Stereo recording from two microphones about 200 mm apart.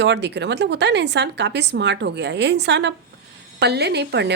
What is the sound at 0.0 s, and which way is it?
A woman's voice, 60° right (ahead or behind).